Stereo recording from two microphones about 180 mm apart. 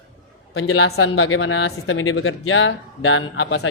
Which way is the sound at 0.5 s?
80° left.